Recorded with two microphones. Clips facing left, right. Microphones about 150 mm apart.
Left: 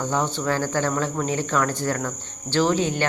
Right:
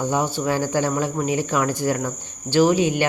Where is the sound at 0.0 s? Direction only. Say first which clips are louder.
Right 2 dB; 10° right (ahead or behind).